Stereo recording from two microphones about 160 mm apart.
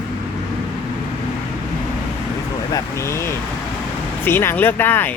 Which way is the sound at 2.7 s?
20° left (ahead or behind).